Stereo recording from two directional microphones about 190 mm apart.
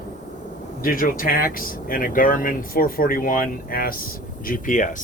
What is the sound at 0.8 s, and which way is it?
Speech, 45° left (ahead or behind).